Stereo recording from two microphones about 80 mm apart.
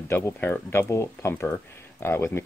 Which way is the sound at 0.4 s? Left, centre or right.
Left.